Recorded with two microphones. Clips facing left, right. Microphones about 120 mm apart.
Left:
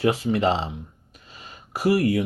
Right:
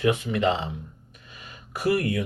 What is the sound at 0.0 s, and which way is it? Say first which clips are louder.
Speech: left 2 dB; 35° left (ahead or behind).